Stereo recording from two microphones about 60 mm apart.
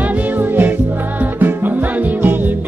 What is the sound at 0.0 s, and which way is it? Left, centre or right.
Music, right.